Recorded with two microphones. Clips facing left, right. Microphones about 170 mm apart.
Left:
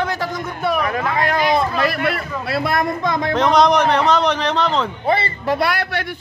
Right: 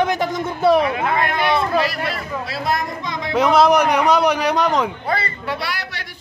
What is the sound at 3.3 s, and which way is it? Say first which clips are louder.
A man's voice: right 1 dB; 5° right (ahead or behind).